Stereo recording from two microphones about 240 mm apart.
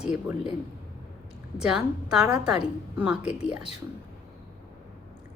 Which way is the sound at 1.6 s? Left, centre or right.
Centre.